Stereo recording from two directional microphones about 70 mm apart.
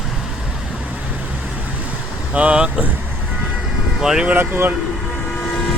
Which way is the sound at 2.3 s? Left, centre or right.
Centre.